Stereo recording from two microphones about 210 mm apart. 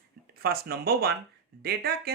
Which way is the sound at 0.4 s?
45° right (ahead or behind).